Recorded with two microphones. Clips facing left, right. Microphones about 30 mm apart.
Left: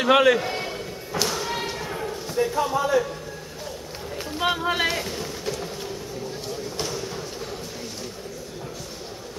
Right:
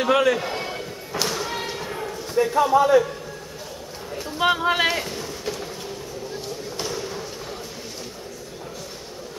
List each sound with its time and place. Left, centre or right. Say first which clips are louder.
0.1 s a man's voice: left 3 dB; centre
0.4 s slam: even; centre
2.3 s a man's voice: right 6 dB; centre
4.4 s a man's voice: right 4 dB; centre
4.8 s a sound: right 2 dB; centre
6.9 s a sound: right 1 dB; centre